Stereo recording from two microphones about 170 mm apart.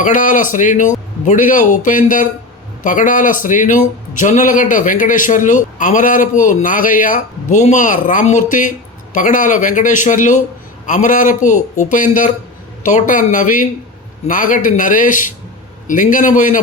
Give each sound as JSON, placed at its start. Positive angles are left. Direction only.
{"t": 0.0, "sound": "a man's voice", "side_deg": 50}